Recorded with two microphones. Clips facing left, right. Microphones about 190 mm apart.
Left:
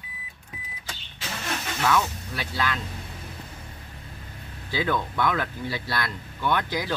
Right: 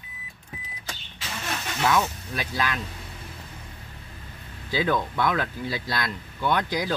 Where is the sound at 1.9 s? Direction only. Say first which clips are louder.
Even; 15° right (ahead or behind).